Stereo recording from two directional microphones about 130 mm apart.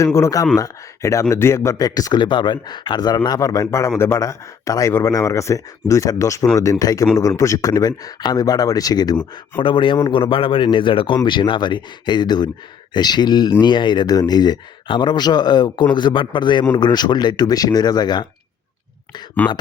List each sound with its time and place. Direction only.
0.0 s a man's voice: 20° left (ahead or behind)
9.6 s speech: 40° left (ahead or behind)
19.4 s speech: 15° left (ahead or behind)